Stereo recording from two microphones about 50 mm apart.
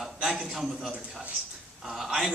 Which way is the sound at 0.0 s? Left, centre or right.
Centre.